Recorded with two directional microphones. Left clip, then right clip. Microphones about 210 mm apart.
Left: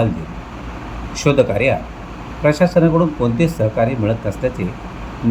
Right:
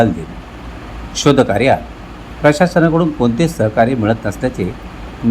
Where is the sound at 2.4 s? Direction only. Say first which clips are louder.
Right 2 dB; 20° right (ahead or behind).